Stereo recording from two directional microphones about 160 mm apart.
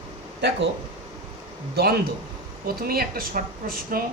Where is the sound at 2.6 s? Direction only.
70° right (ahead or behind).